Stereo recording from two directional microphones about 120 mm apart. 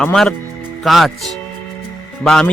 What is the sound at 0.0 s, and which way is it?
A man's voice, 5° left (ahead or behind).